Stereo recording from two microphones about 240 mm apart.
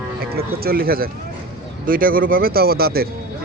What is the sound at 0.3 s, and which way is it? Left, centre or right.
Speech, right.